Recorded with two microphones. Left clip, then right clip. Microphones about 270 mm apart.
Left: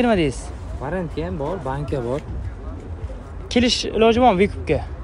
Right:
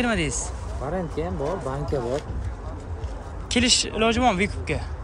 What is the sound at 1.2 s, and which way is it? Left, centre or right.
Speech, left.